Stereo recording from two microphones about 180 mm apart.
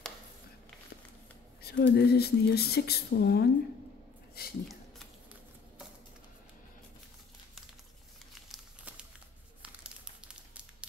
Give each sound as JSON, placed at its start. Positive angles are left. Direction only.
{"t": 1.6, "sound": "speech", "side_deg": 65}
{"t": 4.6, "sound": "a sound", "side_deg": 0}
{"t": 8.5, "sound": "crumpling", "side_deg": -5}